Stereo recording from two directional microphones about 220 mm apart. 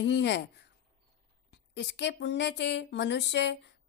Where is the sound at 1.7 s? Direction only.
50° left (ahead or behind).